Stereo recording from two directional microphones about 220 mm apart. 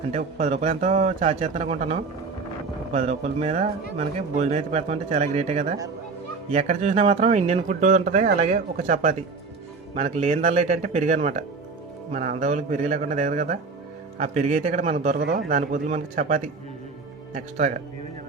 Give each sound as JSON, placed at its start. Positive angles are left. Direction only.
{"t": 0.1, "sound": "speech", "side_deg": -35}